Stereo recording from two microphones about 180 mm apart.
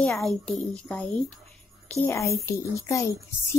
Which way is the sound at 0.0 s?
5° left (ahead or behind).